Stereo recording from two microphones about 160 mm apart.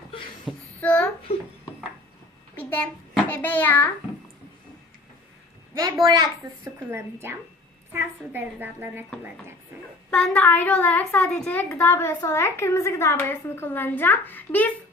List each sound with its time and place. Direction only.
0.5 s child singing: 5° right (ahead or behind)
0.8 s a sound: 10° left (ahead or behind)
2.6 s a child's voice: 10° left (ahead or behind)
5.7 s a child's voice: 20° right (ahead or behind)
6.7 s a woman's voice: 15° right (ahead or behind)
10.1 s a woman's voice: 5° left (ahead or behind)